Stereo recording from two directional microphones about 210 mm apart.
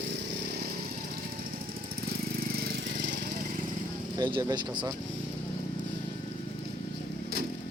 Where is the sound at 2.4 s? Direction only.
45° right (ahead or behind).